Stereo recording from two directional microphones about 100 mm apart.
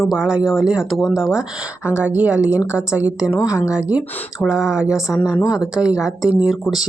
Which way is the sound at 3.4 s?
30° left (ahead or behind).